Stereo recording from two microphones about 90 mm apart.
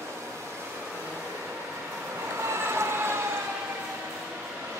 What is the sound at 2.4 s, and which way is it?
Vehicle, 30° right (ahead or behind).